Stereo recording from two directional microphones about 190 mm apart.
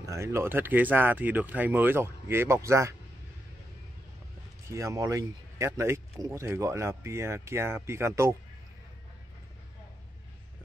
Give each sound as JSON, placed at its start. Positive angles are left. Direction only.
{"t": 0.0, "sound": "speech", "side_deg": -15}
{"t": 4.6, "sound": "speech", "side_deg": -15}